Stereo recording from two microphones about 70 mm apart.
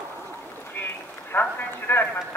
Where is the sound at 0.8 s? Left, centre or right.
Left.